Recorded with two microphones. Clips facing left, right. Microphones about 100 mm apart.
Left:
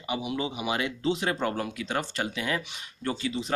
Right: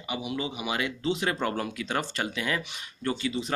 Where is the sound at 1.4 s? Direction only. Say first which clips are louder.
Even; 15° left (ahead or behind).